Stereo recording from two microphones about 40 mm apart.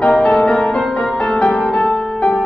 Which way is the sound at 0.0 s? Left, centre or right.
Left.